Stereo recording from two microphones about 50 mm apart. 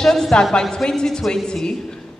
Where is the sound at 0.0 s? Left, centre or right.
Centre.